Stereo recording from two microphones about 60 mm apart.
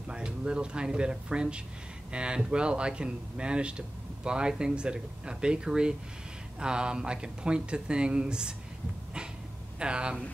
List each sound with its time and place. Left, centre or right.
0.1 s speech: centre
9.8 s speech: centre